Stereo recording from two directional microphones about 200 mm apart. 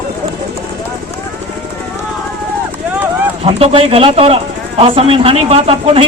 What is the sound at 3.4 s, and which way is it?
A man's voice, 30° right (ahead or behind).